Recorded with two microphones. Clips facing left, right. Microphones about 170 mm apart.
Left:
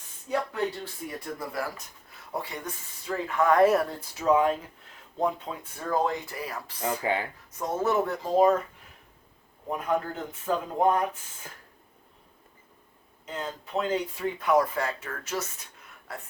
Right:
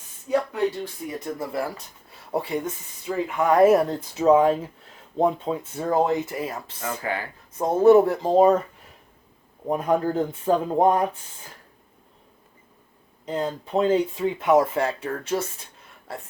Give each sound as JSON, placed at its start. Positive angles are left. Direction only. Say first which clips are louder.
{"t": 1.0, "sound": "speech", "louder": "right 4 dB", "side_deg": -25}
{"t": 3.1, "sound": "speech", "louder": "right 2 dB", "side_deg": -15}
{"t": 7.0, "sound": "speech", "louder": "left 1 dB", "side_deg": 20}
{"t": 7.6, "sound": "speech", "louder": "right 11 dB", "side_deg": -35}
{"t": 9.6, "sound": "speech", "louder": "right 6 dB", "side_deg": -35}
{"t": 13.2, "sound": "speech", "louder": "right 8 dB", "side_deg": -35}